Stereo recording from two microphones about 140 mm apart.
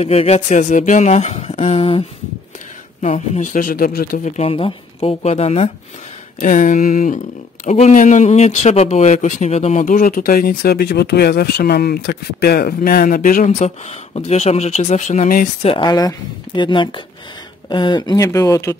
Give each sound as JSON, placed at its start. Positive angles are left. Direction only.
{"t": 0.0, "sound": "speech", "side_deg": 50}
{"t": 3.0, "sound": "speech", "side_deg": 60}
{"t": 4.4, "sound": "speech", "side_deg": 40}
{"t": 6.4, "sound": "speech", "side_deg": 65}
{"t": 15.6, "sound": "speech", "side_deg": 35}